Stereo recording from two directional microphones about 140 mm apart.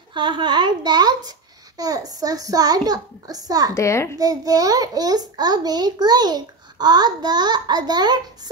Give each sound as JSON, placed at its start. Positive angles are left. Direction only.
{"t": 0.1, "sound": "a woman's voice", "side_deg": -35}
{"t": 3.7, "sound": "a child's voice", "side_deg": 20}
{"t": 4.2, "sound": "a child's voice", "side_deg": -25}